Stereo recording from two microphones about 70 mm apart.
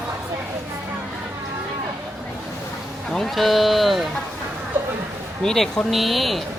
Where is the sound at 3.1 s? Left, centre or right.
Centre.